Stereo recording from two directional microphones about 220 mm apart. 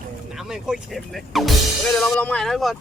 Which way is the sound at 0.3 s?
Centre (ahead or behind).